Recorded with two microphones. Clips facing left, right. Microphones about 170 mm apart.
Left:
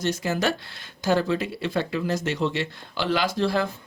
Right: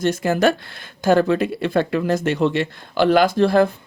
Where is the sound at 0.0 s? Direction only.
55° right (ahead or behind).